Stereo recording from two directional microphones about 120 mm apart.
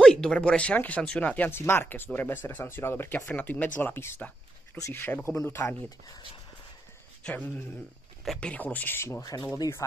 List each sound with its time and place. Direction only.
0.0 s speech: 5° left (ahead or behind); by 6.2 s 30° left (ahead or behind)
7.2 s speech: 15° left (ahead or behind)
9.2 s speech: 30° left (ahead or behind)